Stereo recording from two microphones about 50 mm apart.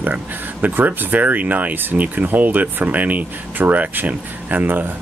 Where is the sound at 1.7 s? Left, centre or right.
Right.